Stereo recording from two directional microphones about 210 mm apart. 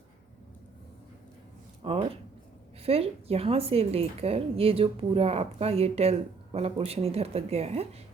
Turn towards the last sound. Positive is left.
turn(degrees=-30)  # may be behind; listen again after turning